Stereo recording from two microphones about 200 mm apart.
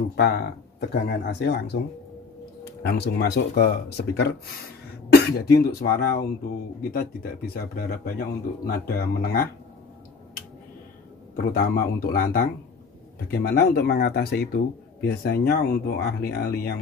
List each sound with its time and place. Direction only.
0.1 s speech: 55° left (ahead or behind)
2.8 s speech: 55° left (ahead or behind)
11.3 s speech: 50° left (ahead or behind)